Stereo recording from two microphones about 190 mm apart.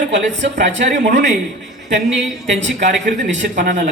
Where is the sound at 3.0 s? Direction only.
70° right (ahead or behind).